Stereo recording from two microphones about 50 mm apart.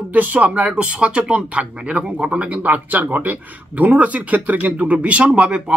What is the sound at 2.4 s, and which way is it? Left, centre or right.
Speech, right.